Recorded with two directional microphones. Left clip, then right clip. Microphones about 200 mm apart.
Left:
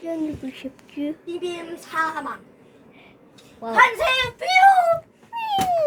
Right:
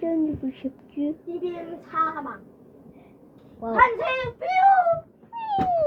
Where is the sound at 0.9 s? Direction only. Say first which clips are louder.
Even; 15° left (ahead or behind).